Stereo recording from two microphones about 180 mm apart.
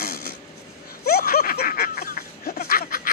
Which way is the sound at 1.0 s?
55° left (ahead or behind).